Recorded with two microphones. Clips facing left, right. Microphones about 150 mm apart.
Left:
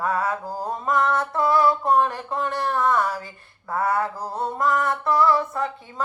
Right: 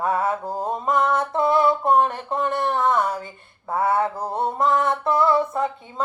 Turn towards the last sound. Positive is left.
turn(degrees=-25)  # may be behind; listen again after turning